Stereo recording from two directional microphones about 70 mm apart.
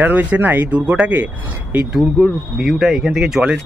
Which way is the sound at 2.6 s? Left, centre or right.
Centre.